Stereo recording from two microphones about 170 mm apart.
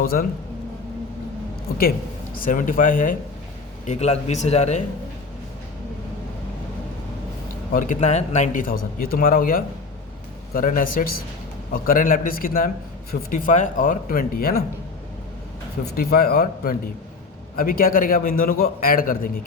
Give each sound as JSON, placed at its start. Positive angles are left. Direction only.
{"t": 0.0, "sound": "a man's voice", "side_deg": 60}
{"t": 2.3, "sound": "speech", "side_deg": 50}
{"t": 3.8, "sound": "speech", "side_deg": 40}
{"t": 7.7, "sound": "a man's voice", "side_deg": 50}
{"t": 15.8, "sound": "a man's voice", "side_deg": 60}